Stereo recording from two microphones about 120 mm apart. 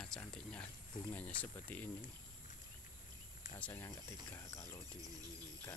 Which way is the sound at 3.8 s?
25° left (ahead or behind).